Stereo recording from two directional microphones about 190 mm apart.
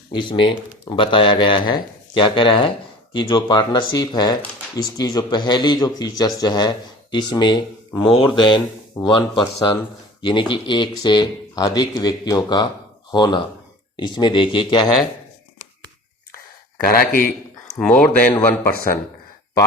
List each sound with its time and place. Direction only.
0.1 s speech: 25° left (ahead or behind)
7.9 s speech: centre (ahead or behind)
8.4 s speech: 25° left (ahead or behind)
17.0 s a man's voice: 50° left (ahead or behind)
17.7 s a sound: centre (ahead or behind)
18.3 s speech: 10° left (ahead or behind)